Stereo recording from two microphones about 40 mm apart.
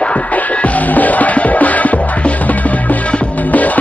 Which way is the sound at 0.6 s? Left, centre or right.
Left.